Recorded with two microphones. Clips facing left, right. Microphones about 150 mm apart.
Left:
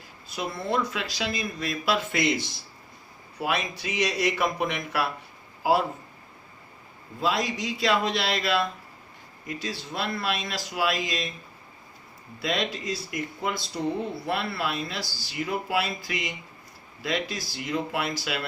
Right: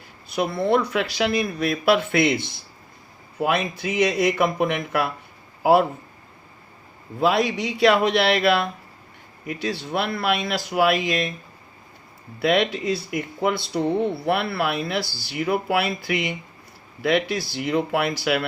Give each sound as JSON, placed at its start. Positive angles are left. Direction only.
{"t": 0.3, "sound": "speech", "side_deg": -60}
{"t": 7.2, "sound": "speech", "side_deg": -60}
{"t": 12.4, "sound": "speech", "side_deg": -60}